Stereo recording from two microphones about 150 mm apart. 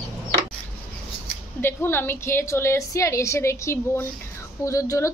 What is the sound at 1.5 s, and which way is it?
A woman's voice, 15° left (ahead or behind).